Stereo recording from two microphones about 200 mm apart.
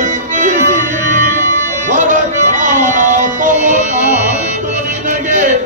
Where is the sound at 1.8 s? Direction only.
40° right (ahead or behind).